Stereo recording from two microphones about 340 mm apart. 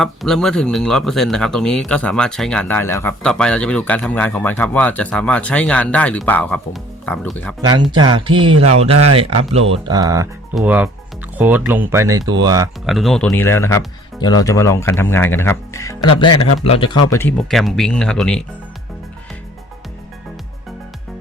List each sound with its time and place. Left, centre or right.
0.0 s speech: centre
7.6 s speech: centre
12.8 s speech: centre